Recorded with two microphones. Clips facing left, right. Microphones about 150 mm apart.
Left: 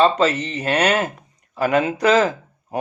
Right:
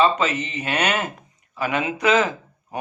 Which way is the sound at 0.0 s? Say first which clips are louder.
Left 3 dB; 35° left (ahead or behind).